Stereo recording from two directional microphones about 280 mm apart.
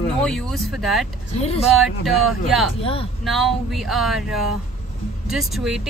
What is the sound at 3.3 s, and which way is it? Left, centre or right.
Speech, centre.